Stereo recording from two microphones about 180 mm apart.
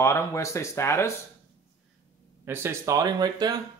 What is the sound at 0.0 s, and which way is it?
Speech, 15° left (ahead or behind).